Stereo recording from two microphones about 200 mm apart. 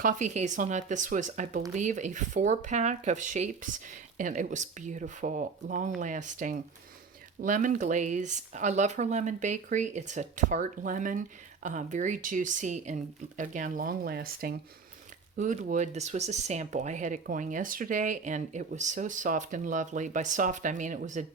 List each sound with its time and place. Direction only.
0.0 s speech: 40° right (ahead or behind)